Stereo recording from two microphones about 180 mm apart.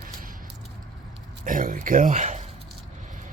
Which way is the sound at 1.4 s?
50° right (ahead or behind).